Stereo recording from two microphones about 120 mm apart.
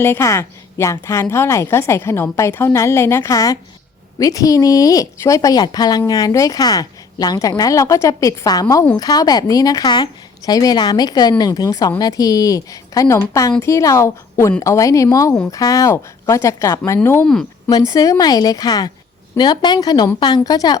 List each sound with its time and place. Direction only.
0.0 s a woman's voice: 20° left (ahead or behind)
17.7 s speech: 30° left (ahead or behind)